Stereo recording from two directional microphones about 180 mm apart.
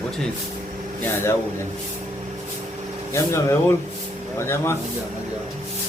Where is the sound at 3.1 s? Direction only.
15° left (ahead or behind).